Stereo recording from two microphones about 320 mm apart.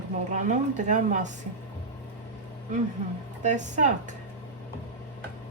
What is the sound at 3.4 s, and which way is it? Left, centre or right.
Speech, right.